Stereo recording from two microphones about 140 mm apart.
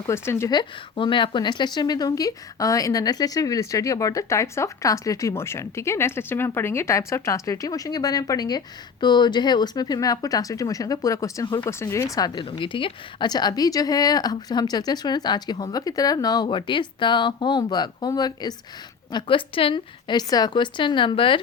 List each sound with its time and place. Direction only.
0.1 s a woman's voice: 20° left (ahead or behind)
0.5 s a woman's voice: 35° left (ahead or behind); by 12.0 s 20° left (ahead or behind)
12.1 s a woman's voice: 30° left (ahead or behind)
19.1 s a woman's voice: 40° left (ahead or behind)